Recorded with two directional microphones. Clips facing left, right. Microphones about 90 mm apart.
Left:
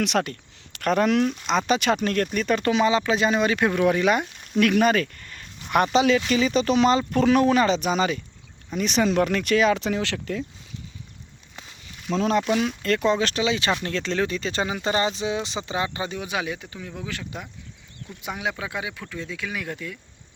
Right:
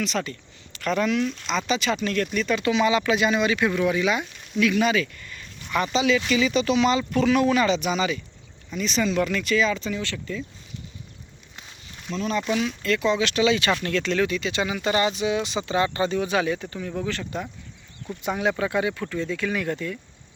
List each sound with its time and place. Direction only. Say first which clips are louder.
0.0 s speech: left 4 dB; 60° left (ahead or behind)
4.6 s a sound: left 2 dB; 55° left (ahead or behind)
5.7 s speech: left 3 dB; 50° left (ahead or behind)
6.3 s speech: left 1 dB; 40° left (ahead or behind)
8.8 s speech: left 2 dB; 55° left (ahead or behind); by 10.4 s 80° left
12.6 s speech: left 1 dB; 45° left (ahead or behind)
13.3 s speech: right 2 dB; 25° left (ahead or behind); by 20.0 s 5° left (ahead or behind)